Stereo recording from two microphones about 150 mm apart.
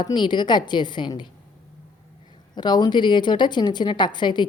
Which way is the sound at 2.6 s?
30° left (ahead or behind).